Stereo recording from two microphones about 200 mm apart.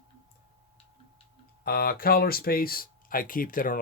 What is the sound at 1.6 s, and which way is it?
Speech, 50° left (ahead or behind).